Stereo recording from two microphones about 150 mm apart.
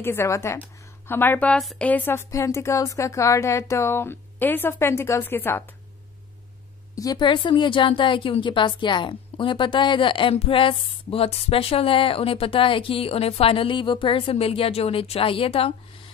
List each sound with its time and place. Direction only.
0.0 s a woman's voice: 15° left (ahead or behind)
7.0 s a woman's voice: 30° left (ahead or behind)